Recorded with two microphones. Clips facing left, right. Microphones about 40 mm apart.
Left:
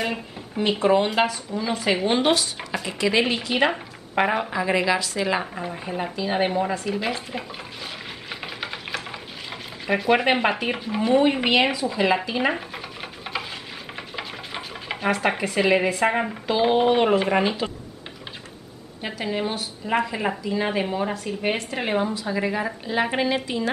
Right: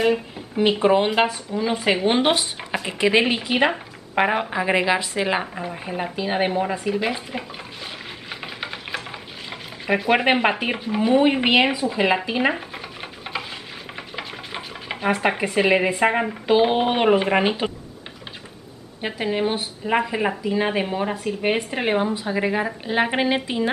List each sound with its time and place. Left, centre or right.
0.0 s a sound: centre
0.7 s a woman's voice: centre
5.4 s speech: centre
8.3 s a sound: centre
9.5 s stir: centre
10.6 s speech: centre
12.3 s stir: centre
15.0 s a woman's voice: centre
18.9 s a woman's voice: centre